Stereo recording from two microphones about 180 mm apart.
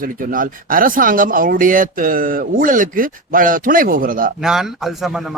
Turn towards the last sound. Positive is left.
turn(degrees=0)  # may be behind; listen again after turning